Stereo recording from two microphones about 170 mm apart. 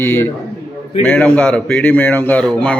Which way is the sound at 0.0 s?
15° left (ahead or behind).